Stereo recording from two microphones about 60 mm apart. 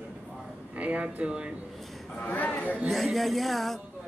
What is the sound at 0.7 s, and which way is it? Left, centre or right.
Speech, right.